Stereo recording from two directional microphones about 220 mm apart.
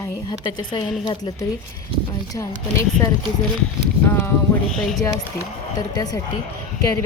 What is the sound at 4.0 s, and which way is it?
Speech, 10° left (ahead or behind).